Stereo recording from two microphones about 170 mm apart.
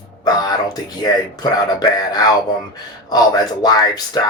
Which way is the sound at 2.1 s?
25° left (ahead or behind).